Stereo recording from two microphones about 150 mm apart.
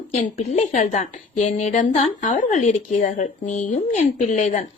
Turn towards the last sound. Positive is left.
turn(degrees=55)  # may be behind; listen again after turning